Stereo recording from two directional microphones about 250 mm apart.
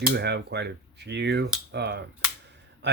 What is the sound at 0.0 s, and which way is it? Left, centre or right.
Speech, right.